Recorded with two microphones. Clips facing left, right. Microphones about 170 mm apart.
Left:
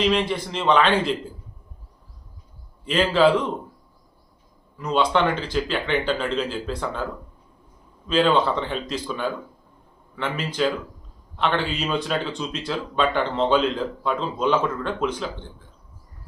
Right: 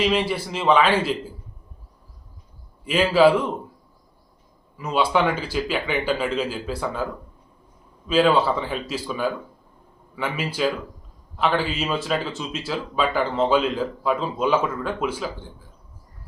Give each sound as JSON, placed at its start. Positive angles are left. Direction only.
{"t": 0.0, "sound": "speech", "side_deg": -5}
{"t": 2.8, "sound": "speech", "side_deg": -10}
{"t": 4.8, "sound": "speech", "side_deg": -5}